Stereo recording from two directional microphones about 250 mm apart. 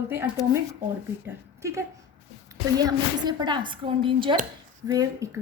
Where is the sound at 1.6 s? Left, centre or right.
Centre.